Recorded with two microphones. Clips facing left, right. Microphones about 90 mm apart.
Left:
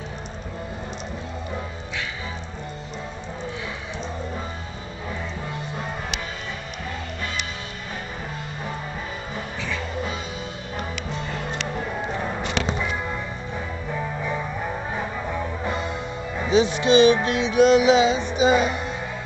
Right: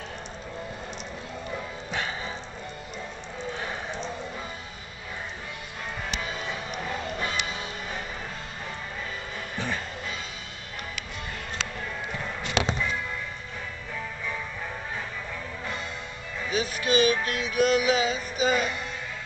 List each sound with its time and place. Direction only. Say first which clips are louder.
11.7 s music: left 7 dB; 25° left (ahead or behind)
13.9 s music: left 7 dB; 30° left (ahead or behind)